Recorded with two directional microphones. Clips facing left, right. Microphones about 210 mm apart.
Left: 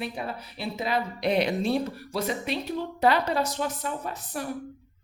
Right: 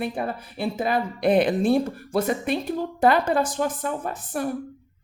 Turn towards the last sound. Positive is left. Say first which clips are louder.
# right 5 dB
turn(degrees=-50)  # may be behind; listen again after turning